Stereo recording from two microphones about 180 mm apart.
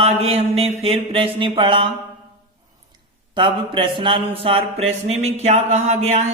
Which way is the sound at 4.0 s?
25° right (ahead or behind).